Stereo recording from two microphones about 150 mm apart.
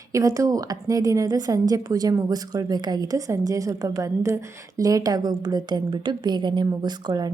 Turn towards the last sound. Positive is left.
turn(degrees=-25)  # may be behind; listen again after turning